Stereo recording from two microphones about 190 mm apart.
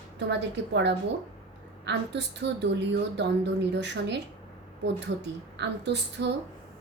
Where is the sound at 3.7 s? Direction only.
65° right (ahead or behind).